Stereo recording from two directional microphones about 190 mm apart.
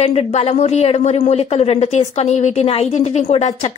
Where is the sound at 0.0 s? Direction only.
30° left (ahead or behind).